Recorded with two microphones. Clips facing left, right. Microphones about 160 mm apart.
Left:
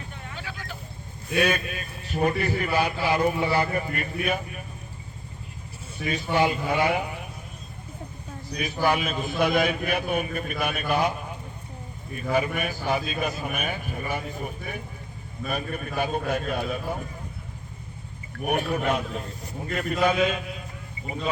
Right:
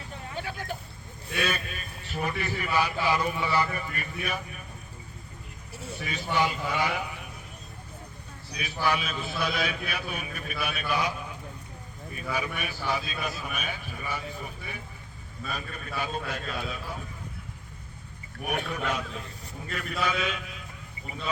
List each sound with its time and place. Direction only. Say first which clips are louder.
0.3 s vehicle: right 5 dB; 45° right (ahead or behind)
1.3 s a man's voice: left 7 dB; 50° left (ahead or behind)
6.1 s a man's voice: left 5 dB; 55° left (ahead or behind)
8.5 s a man's voice: left 4 dB; 50° left (ahead or behind)
12.3 s a man's voice: left 7 dB; 50° left (ahead or behind)
18.4 s a man's voice: left 6 dB; 55° left (ahead or behind)